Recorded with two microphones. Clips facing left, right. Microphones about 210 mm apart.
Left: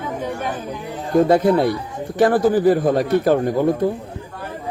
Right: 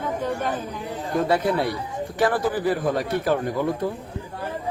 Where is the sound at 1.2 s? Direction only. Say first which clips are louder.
Left 5 dB; 45° left (ahead or behind).